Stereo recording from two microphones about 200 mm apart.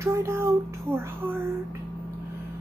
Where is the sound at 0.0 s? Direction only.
15° right (ahead or behind).